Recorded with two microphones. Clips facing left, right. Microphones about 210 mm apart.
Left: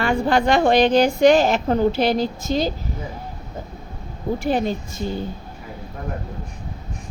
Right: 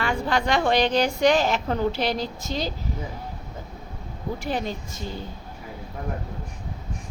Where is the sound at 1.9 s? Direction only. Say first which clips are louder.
Left 6 dB; 50° left (ahead or behind).